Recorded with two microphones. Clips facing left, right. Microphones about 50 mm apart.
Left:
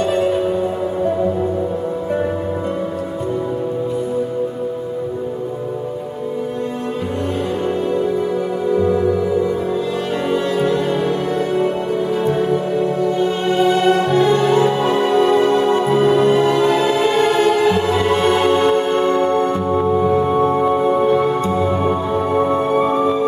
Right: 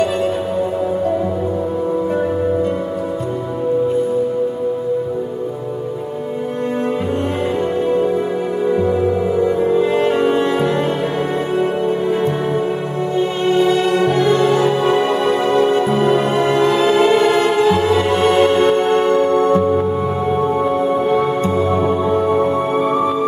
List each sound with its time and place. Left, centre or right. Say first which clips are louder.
13.6 s music: left 1 dB; left
14.2 s music: even; right
16.2 s music: left 1 dB; right
20.4 s music: left 1 dB; centre
22.3 s music: right 1 dB; centre